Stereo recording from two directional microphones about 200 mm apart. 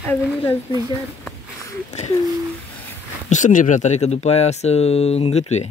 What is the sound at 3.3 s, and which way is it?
Speech, 40° left (ahead or behind).